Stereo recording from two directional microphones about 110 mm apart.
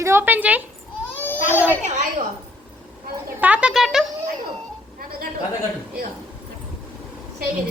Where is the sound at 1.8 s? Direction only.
90° right.